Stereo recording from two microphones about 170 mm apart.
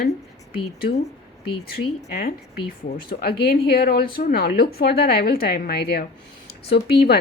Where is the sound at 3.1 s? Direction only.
65° left (ahead or behind).